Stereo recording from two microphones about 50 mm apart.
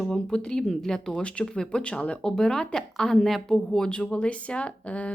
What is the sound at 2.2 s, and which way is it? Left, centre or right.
Speech, centre.